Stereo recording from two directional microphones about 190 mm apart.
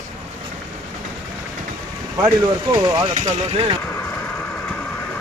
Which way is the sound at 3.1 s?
35° right (ahead or behind).